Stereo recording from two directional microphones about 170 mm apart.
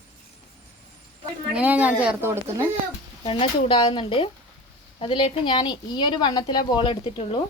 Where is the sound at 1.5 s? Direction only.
10° right (ahead or behind).